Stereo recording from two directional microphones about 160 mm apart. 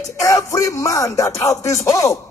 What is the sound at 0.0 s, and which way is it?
Music, 20° left (ahead or behind).